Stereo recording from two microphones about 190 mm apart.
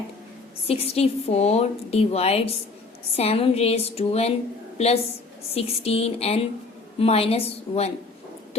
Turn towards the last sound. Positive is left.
turn(degrees=35)  # may be behind; listen again after turning